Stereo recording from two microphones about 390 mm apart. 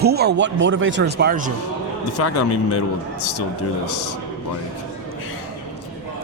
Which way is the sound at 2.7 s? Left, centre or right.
Left.